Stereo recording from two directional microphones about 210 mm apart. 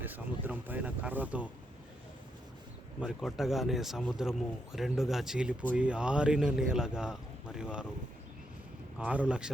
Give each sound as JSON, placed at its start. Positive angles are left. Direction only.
{"t": 0.0, "sound": "speech", "side_deg": -10}
{"t": 3.0, "sound": "speech", "side_deg": 0}
{"t": 9.0, "sound": "speech", "side_deg": -5}